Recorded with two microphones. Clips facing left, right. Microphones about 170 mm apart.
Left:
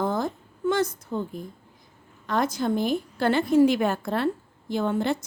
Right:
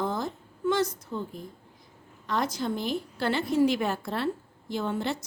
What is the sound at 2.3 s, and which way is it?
A woman's voice, 50° left (ahead or behind).